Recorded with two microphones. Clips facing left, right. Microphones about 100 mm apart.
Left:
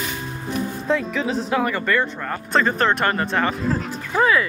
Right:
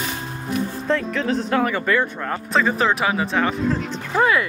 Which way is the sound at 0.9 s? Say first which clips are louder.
Even; 5° left (ahead or behind).